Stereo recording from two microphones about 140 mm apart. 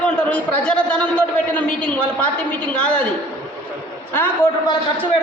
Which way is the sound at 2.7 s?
10° left (ahead or behind).